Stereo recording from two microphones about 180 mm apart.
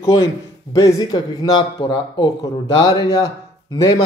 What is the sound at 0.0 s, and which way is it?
A man's voice, 20° left (ahead or behind).